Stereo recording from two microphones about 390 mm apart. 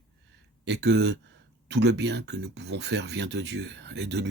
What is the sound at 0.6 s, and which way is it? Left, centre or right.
Speech, right.